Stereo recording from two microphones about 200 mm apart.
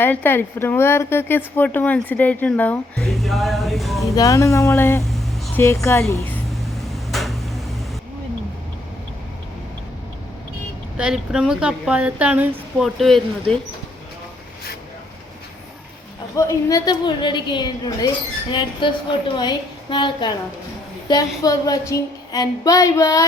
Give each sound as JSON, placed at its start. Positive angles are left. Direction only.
{"t": 0.0, "sound": "a woman's voice", "side_deg": 10}
{"t": 4.1, "sound": "speech", "side_deg": 15}
{"t": 5.0, "sound": "a sound", "side_deg": 0}
{"t": 5.6, "sound": "speech", "side_deg": 15}
{"t": 6.5, "sound": "a sound", "side_deg": 0}
{"t": 10.9, "sound": "a woman's voice", "side_deg": -5}
{"t": 16.3, "sound": "a woman's voice", "side_deg": 15}